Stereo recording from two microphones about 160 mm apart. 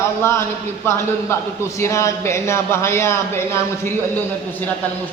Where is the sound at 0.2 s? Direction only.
15° left (ahead or behind).